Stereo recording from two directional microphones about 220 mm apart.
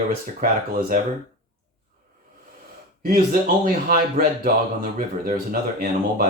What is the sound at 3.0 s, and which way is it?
Speech, 40° right (ahead or behind).